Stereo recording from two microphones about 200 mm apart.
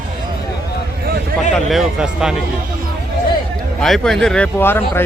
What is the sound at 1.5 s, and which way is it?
Speech, centre (ahead or behind).